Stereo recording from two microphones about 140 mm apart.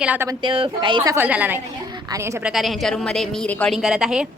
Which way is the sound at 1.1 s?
10° right (ahead or behind).